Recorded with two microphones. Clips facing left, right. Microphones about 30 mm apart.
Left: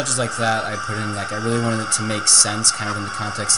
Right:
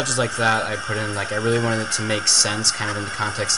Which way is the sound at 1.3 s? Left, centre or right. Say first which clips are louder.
Right 2 dB; right.